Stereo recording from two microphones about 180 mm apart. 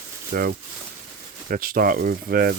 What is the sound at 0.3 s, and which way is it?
Speech, 55° right (ahead or behind).